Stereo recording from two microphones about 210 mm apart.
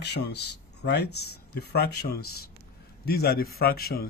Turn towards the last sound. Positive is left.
turn(degrees=45)  # may be behind; listen again after turning